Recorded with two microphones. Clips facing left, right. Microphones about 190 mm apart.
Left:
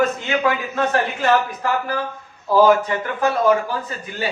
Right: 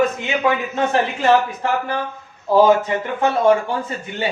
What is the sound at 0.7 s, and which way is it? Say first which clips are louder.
A man's voice: right 1 dB; 25° right (ahead or behind).